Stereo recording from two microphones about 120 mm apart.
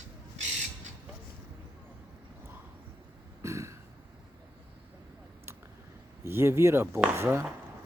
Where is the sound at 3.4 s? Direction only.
25° right (ahead or behind).